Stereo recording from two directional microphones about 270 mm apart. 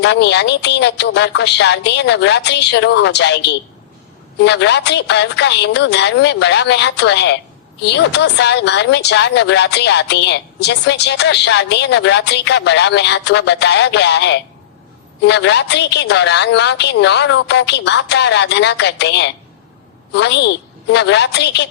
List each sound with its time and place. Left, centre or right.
0.0 s a woman's voice: left